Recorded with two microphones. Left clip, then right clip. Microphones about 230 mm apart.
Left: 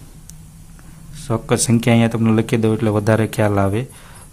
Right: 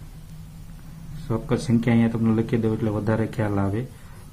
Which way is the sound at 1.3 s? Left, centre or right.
Left.